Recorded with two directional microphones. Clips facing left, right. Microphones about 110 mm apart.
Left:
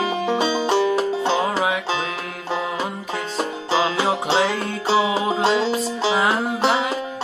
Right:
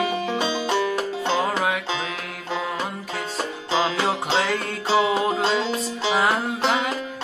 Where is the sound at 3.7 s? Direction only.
5° left (ahead or behind).